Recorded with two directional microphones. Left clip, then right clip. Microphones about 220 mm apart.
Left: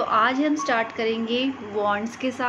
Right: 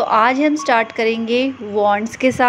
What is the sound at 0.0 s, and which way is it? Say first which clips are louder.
Speech: right 7 dB; 35° right (ahead or behind).